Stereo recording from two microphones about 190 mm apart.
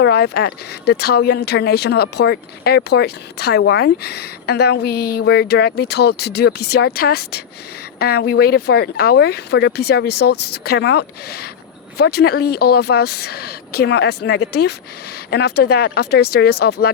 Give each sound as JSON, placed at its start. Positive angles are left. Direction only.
{"t": 0.0, "sound": "speech", "side_deg": 60}